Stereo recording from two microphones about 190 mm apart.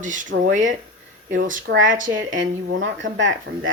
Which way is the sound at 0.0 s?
40° right (ahead or behind).